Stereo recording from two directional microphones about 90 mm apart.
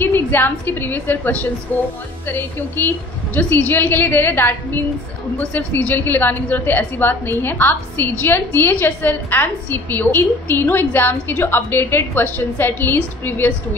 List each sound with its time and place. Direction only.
0.0 s a woman's voice: 25° left (ahead or behind)